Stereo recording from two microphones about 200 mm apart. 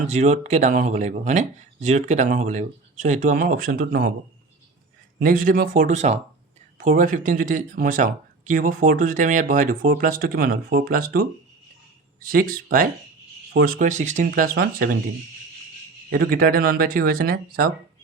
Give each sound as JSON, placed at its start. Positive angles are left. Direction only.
{"t": 0.1, "sound": "speech", "side_deg": -35}
{"t": 5.2, "sound": "speech", "side_deg": -45}
{"t": 14.3, "sound": "speech", "side_deg": -50}
{"t": 16.0, "sound": "speech", "side_deg": -45}